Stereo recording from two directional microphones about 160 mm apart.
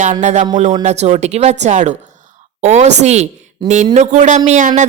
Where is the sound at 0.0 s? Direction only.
50° right (ahead or behind).